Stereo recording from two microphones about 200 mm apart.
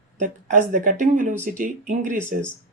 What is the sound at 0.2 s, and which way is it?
Speech, 40° right (ahead or behind).